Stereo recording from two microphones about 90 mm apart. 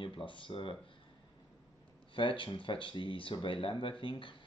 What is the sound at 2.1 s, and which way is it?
Speech, 70° left (ahead or behind).